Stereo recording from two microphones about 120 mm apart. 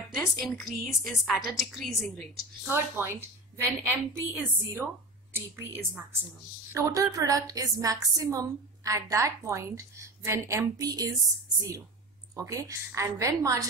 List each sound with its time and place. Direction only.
0.1 s a woman's voice: centre (ahead or behind)
2.7 s a woman's voice: 20° right (ahead or behind)
12.4 s a woman's voice: 25° right (ahead or behind)